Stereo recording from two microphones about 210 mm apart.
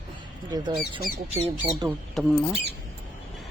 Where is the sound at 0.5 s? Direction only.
20° right (ahead or behind).